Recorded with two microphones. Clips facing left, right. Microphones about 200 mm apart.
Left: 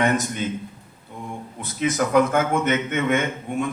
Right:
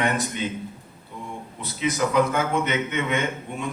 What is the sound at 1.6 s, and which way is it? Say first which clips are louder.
A man's voice: left 2 dB; 50° left (ahead or behind).